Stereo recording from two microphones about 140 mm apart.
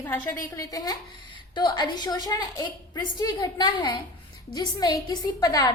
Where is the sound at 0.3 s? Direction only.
25° left (ahead or behind).